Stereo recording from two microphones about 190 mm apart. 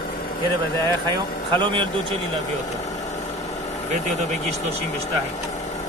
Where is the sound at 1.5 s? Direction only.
25° right (ahead or behind).